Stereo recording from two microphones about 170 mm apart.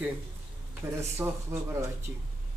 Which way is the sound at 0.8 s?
15° right (ahead or behind).